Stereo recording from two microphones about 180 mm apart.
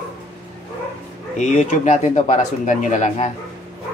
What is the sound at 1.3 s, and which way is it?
Speech, 45° left (ahead or behind).